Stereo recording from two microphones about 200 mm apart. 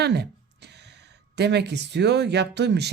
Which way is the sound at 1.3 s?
55° right (ahead or behind).